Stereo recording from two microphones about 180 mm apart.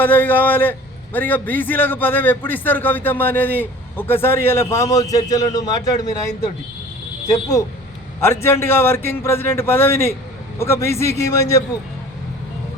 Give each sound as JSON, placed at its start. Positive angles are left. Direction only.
{"t": 0.0, "sound": "a man's voice", "side_deg": 10}
{"t": 7.3, "sound": "a man's voice", "side_deg": 20}